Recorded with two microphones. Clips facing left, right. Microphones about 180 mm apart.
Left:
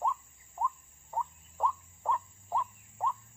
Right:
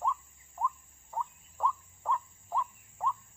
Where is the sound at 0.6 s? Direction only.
10° left (ahead or behind).